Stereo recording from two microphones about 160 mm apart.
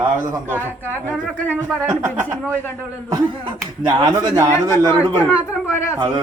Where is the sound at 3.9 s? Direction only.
25° right (ahead or behind).